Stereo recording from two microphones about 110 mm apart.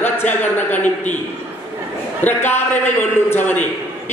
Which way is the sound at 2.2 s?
20° left (ahead or behind).